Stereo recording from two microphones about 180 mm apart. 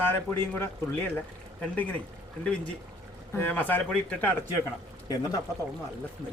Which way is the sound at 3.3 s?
10° left (ahead or behind).